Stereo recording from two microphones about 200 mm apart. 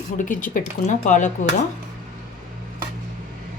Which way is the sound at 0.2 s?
40° left (ahead or behind).